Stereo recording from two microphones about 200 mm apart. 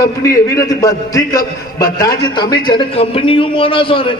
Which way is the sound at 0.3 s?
15° left (ahead or behind).